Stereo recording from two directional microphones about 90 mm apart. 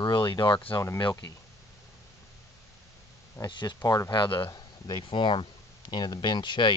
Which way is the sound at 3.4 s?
55° left (ahead or behind).